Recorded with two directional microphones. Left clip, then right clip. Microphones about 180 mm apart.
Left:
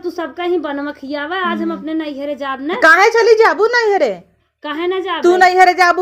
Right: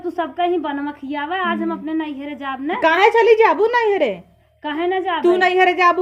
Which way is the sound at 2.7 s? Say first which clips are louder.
Left 4 dB; 25° left (ahead or behind).